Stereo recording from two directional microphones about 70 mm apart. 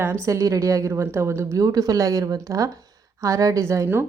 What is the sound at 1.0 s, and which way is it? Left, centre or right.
Speech, right.